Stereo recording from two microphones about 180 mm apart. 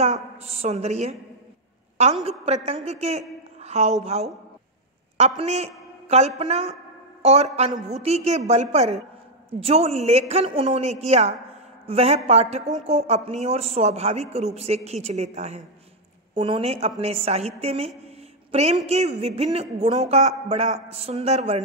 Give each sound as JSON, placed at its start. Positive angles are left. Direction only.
{"t": 0.0, "sound": "a woman's voice", "side_deg": -35}
{"t": 2.2, "sound": "a woman's voice", "side_deg": -35}